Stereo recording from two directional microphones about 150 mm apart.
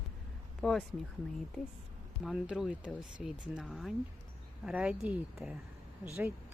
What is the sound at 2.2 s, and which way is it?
Speech, 5° right (ahead or behind).